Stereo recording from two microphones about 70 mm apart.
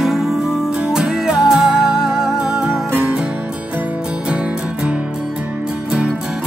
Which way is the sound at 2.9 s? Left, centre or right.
Right.